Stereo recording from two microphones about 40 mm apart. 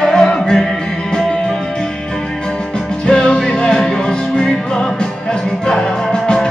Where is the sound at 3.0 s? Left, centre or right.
Left.